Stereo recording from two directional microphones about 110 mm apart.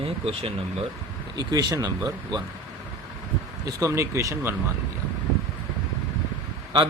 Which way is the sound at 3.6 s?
25° right (ahead or behind).